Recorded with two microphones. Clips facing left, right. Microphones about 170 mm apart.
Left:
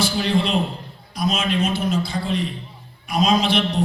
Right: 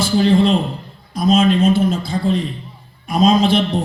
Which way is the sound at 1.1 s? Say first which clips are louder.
Right 8 dB; 50° right (ahead or behind).